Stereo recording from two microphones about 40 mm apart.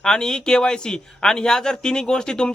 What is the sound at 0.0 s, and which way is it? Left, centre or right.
Speech, centre.